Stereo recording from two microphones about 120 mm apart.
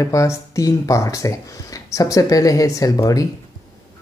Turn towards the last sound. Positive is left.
turn(degrees=30)  # may be behind; listen again after turning